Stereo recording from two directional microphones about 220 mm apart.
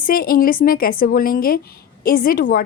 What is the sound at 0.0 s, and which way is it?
A woman's voice, 40° left (ahead or behind).